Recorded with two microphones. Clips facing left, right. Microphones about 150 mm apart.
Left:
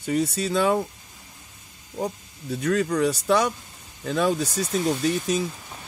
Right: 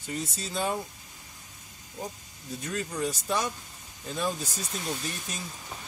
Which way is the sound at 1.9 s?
70° left (ahead or behind).